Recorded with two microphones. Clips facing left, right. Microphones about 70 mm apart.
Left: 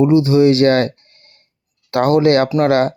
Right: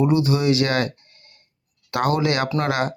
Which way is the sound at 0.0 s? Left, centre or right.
Left.